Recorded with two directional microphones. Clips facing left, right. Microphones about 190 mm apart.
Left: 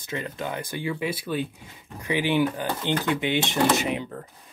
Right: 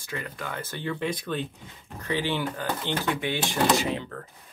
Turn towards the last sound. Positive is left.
turn(degrees=15)  # may be behind; listen again after turning